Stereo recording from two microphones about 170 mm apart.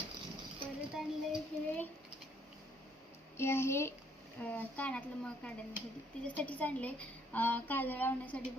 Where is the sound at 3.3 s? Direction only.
15° left (ahead or behind).